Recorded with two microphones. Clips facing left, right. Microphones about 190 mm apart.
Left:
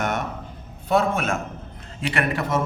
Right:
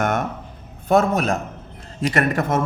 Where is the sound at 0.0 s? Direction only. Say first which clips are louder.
Right 4 dB; 50° right (ahead or behind).